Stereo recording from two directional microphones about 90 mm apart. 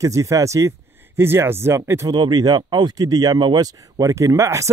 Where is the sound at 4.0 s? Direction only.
40° right (ahead or behind).